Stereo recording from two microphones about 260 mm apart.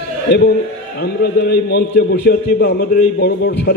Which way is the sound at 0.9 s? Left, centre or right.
Left.